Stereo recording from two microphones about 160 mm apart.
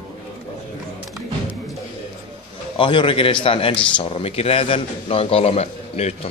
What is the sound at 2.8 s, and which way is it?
A man's voice, 30° left (ahead or behind).